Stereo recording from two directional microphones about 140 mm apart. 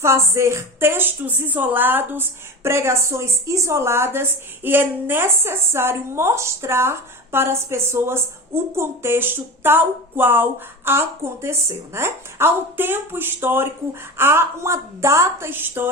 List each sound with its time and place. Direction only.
0.0 s a woman's voice: 20° right (ahead or behind)